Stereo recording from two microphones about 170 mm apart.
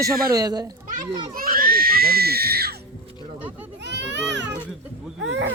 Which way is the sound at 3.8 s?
90° right.